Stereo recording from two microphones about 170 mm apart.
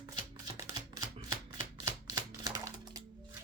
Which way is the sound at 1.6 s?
45° left (ahead or behind).